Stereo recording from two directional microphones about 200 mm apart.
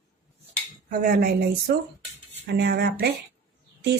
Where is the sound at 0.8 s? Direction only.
45° right (ahead or behind).